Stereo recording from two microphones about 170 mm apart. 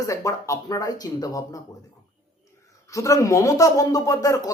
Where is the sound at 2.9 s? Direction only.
20° left (ahead or behind).